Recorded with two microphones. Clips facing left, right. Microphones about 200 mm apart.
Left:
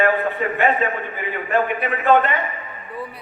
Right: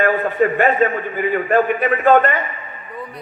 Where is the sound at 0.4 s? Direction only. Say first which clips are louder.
Right 8 dB; 50° right (ahead or behind).